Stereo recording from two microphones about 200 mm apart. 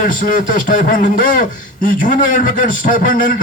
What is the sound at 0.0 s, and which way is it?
A man's voice, 40° left (ahead or behind).